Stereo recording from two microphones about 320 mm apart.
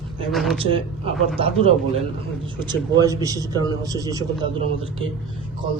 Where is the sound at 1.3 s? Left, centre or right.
Centre.